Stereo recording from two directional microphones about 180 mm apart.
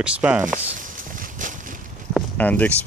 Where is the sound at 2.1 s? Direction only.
10° left (ahead or behind).